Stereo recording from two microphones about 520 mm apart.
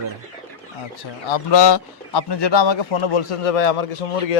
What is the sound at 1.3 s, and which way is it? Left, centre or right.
Speech, left.